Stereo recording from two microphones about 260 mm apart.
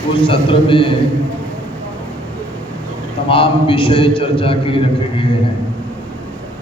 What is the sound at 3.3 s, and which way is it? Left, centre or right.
A man's voice, centre.